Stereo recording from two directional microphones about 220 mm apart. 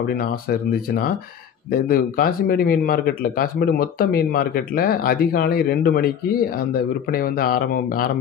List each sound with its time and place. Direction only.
1.7 s speech: 40° left (ahead or behind)
7.1 s speech: 40° left (ahead or behind)